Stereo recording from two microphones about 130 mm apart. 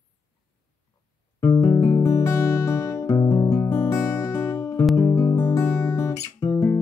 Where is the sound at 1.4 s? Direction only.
30° left (ahead or behind).